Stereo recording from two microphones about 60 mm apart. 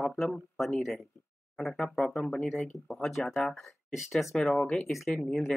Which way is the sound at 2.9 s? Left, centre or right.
Centre.